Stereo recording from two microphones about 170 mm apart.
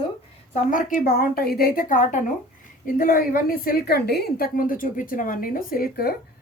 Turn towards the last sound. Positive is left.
turn(degrees=65)  # may be behind; listen again after turning